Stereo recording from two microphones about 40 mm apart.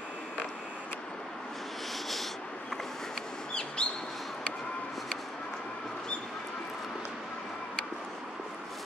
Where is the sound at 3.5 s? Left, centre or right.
Left.